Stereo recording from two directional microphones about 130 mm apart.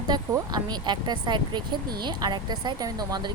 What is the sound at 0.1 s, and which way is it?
A woman's voice, 35° right (ahead or behind).